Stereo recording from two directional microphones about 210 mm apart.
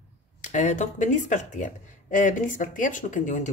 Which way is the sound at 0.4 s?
35° left (ahead or behind).